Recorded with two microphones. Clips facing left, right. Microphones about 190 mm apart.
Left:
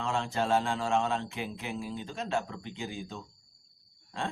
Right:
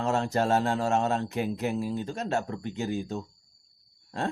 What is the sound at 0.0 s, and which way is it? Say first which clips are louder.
Speech: right 5 dB; 45° right (ahead or behind).